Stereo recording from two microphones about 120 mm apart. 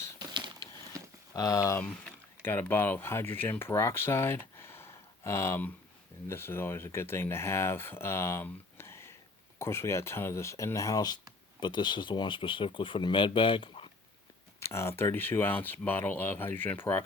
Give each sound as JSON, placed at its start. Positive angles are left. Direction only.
{"t": 0.2, "sound": "a sound", "side_deg": -40}
{"t": 1.4, "sound": "speech", "side_deg": 30}
{"t": 14.6, "sound": "speech", "side_deg": 20}